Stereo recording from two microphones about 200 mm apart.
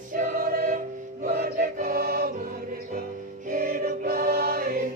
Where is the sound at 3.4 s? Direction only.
45° right (ahead or behind).